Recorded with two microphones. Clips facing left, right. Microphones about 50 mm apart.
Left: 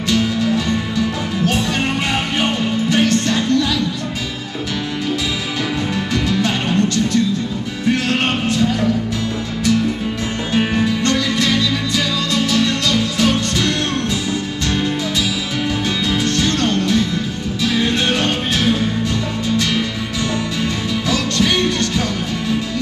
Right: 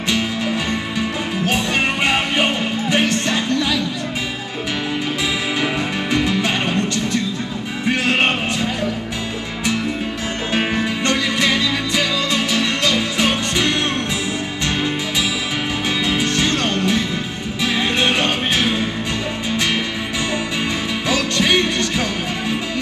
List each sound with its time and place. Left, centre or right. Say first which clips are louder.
0.1 s music: left 4 dB; right
6.1 s music: even; right
7.8 s music: even; right
10.5 s music: left 3 dB; right
16.1 s music: left 1 dB; right
21.1 s music: right 1 dB; right